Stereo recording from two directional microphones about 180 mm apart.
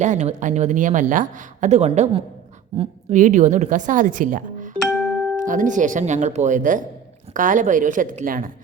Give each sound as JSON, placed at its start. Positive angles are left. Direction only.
{"t": 0.0, "sound": "a woman's voice", "side_deg": -40}
{"t": 4.8, "sound": "music", "side_deg": 5}
{"t": 5.4, "sound": "a woman's voice", "side_deg": -45}